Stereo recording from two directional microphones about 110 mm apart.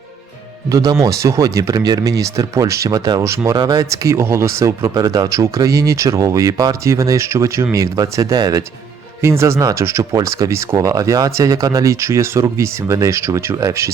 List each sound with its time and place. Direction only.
0.7 s speech: 30° right (ahead or behind)